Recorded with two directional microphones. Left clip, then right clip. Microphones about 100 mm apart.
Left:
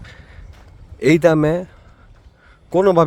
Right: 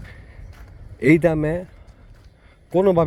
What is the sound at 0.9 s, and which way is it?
Speech, 70° left (ahead or behind).